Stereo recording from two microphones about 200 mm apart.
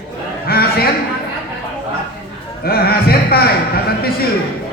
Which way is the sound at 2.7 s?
50° left (ahead or behind).